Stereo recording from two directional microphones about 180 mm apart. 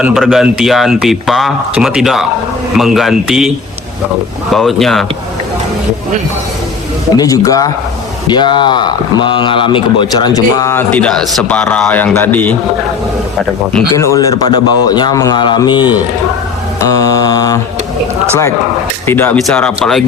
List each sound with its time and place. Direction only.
0.0 s speech: centre (ahead or behind)
4.5 s speech: centre (ahead or behind)
7.2 s speech: 20° left (ahead or behind)
13.9 s speech: 15° left (ahead or behind)
19.0 s speech: 10° left (ahead or behind)